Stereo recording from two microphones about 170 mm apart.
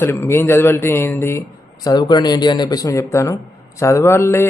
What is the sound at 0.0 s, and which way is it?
A man's voice, 15° left (ahead or behind).